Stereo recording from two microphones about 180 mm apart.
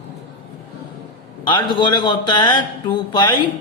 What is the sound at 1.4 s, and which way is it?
Speech, 25° left (ahead or behind).